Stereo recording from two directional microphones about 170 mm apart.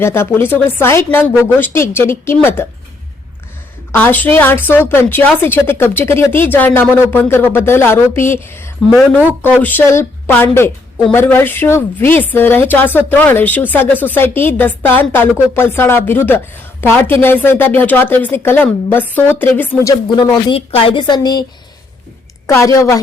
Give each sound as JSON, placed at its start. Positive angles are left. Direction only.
{"t": 0.0, "sound": "speech", "side_deg": 15}
{"t": 3.9, "sound": "a woman's voice", "side_deg": 10}
{"t": 22.4, "sound": "speech", "side_deg": 20}